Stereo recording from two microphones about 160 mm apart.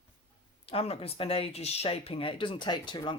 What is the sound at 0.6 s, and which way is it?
Speech, 40° left (ahead or behind).